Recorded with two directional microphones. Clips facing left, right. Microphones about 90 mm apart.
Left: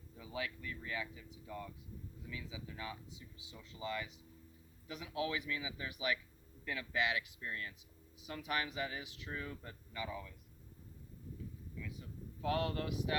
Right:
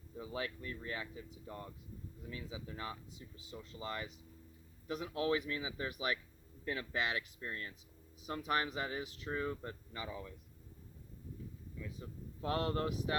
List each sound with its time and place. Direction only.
0.2 s speech: 40° right (ahead or behind)
11.8 s speech: 35° right (ahead or behind)